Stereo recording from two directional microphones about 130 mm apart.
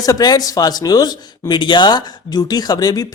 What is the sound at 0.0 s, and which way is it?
Speech, 30° left (ahead or behind).